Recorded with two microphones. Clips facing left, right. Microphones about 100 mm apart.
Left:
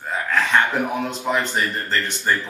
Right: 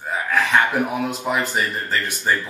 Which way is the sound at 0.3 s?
10° right (ahead or behind).